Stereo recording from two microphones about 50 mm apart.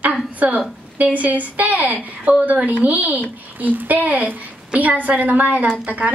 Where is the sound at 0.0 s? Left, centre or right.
Right.